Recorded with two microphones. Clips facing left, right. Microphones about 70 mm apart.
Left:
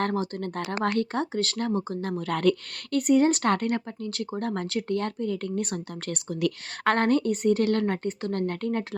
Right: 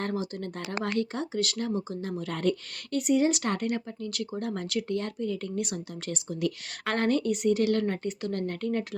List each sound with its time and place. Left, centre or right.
0.0 s a woman's voice: left